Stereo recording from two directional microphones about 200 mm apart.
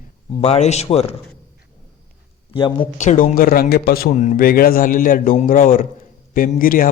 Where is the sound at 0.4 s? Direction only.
35° left (ahead or behind).